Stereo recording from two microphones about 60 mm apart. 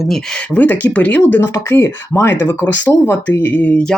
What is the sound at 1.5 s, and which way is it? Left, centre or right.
Speech, left.